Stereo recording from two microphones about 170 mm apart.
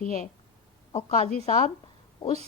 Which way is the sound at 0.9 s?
40° left (ahead or behind).